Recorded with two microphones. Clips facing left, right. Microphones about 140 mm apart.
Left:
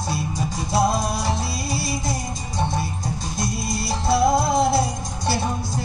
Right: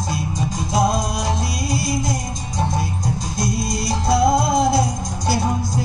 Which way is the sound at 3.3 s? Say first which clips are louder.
Right 3 dB; 5° left (ahead or behind).